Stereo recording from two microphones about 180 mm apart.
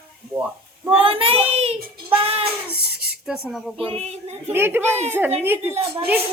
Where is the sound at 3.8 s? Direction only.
35° right (ahead or behind).